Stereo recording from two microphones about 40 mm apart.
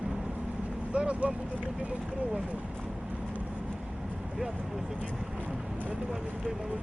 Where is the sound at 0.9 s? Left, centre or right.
Right.